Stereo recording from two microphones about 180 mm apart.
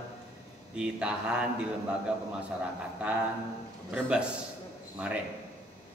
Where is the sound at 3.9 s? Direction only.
5° right (ahead or behind).